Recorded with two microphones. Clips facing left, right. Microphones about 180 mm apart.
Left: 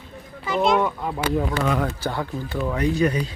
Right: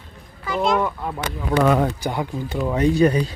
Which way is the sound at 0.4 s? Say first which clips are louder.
Left 1 dB; 20° left (ahead or behind).